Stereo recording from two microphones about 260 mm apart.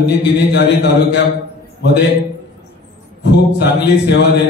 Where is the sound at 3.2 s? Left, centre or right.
Left.